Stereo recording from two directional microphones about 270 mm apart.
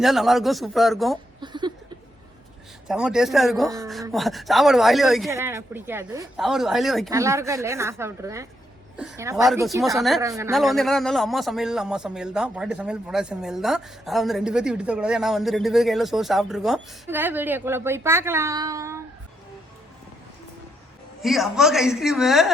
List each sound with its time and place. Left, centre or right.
0.0 s a man's voice: centre
1.4 s a sound: centre
2.8 s a man's voice: centre
7.1 s a man's voice: centre
10.2 s speech: centre
10.5 s a man's voice: centre
21.2 s a man's voice: centre